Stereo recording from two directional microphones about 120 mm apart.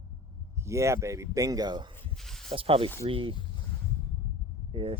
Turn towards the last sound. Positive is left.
turn(degrees=-45)  # may be behind; listen again after turning